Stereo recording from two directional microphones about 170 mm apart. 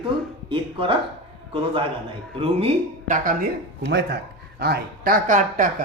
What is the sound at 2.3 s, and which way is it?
Speech, 35° right (ahead or behind).